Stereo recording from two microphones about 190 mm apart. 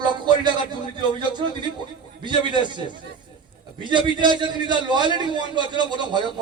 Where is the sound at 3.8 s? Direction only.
25° right (ahead or behind).